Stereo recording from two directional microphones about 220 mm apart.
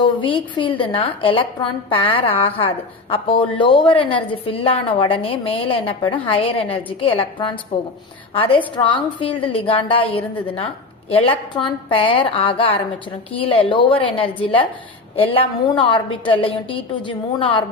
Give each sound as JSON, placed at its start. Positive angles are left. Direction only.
{"t": 0.0, "sound": "a woman's voice", "side_deg": 20}